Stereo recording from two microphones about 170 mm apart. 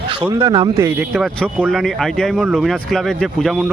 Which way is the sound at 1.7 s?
Centre (ahead or behind).